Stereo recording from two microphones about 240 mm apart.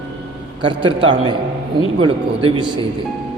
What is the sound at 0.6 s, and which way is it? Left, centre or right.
A man's voice, right.